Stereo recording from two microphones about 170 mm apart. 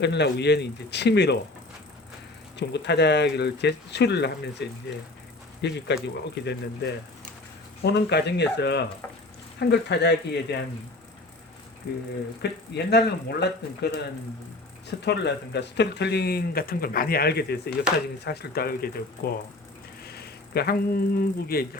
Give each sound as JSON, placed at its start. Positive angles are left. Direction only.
{"t": 0.0, "sound": "a man's voice", "side_deg": 90}
{"t": 2.6, "sound": "a man's voice", "side_deg": 90}
{"t": 12.4, "sound": "speech", "side_deg": 80}
{"t": 18.3, "sound": "speech", "side_deg": 65}